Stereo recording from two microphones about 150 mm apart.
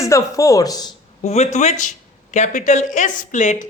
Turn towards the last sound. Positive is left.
turn(degrees=55)  # may be behind; listen again after turning